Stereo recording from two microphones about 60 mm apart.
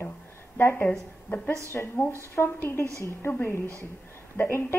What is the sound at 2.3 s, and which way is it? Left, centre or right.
Speech, left.